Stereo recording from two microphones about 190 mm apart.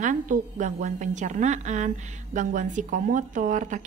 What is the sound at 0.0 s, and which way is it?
A woman's voice, 40° right (ahead or behind).